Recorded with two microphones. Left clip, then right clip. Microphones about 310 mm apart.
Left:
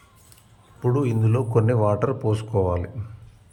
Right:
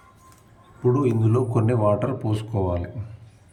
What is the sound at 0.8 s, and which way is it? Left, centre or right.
Speech, centre.